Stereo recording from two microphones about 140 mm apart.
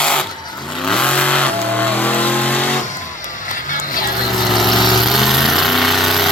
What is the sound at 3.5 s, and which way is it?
Music, 75° left (ahead or behind).